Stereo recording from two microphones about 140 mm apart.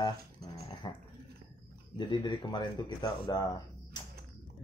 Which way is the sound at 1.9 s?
35° left (ahead or behind).